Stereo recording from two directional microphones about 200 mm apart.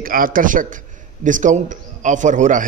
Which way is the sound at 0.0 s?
45° right (ahead or behind).